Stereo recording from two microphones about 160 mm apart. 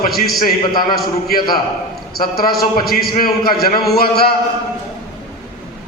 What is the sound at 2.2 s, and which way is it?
A man's voice, 70° left (ahead or behind).